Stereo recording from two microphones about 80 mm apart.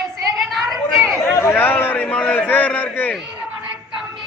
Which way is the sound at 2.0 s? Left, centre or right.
Centre.